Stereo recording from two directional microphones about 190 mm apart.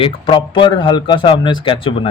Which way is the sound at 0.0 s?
25° left (ahead or behind).